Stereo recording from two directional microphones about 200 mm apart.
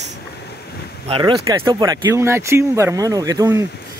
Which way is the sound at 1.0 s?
25° right (ahead or behind).